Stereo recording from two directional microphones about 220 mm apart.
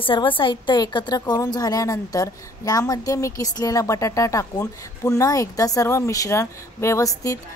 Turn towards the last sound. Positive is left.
turn(degrees=15)  # may be behind; listen again after turning